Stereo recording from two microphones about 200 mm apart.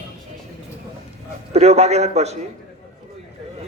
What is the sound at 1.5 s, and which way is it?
Speech, 35° right (ahead or behind).